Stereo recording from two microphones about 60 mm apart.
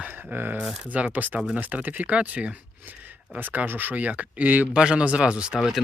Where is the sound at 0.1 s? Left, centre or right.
Right.